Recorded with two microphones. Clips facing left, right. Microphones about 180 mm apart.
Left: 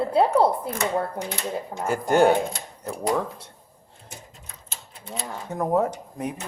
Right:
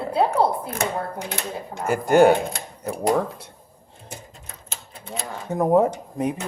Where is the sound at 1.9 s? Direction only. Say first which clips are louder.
Right 3 dB; 10° right (ahead or behind).